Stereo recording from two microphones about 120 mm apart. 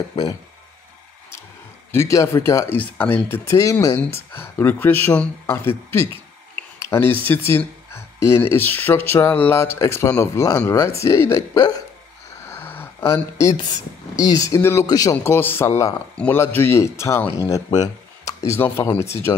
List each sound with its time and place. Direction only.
1.9 s speech: 25° left (ahead or behind)
12.4 s a sound: 20° left (ahead or behind)
14.1 s speech: 30° left (ahead or behind)
15.3 s speech: 20° left (ahead or behind)